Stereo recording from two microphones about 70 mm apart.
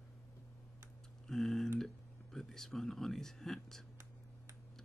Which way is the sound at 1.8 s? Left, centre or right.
Centre.